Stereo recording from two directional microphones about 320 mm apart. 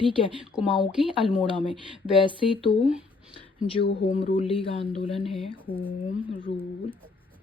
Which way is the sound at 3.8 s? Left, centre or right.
Left.